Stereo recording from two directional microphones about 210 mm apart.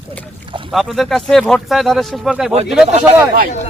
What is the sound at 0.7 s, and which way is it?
Speech, centre (ahead or behind).